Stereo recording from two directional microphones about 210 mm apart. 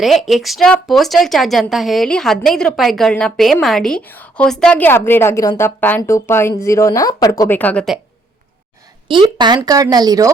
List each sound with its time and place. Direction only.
0.0 s speech: centre (ahead or behind)
9.0 s speech: 20° right (ahead or behind)